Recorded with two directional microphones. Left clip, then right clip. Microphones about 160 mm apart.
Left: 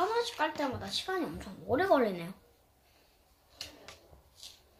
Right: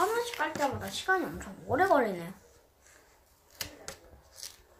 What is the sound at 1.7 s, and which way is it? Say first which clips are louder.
Speech: right 2 dB; 25° left (ahead or behind).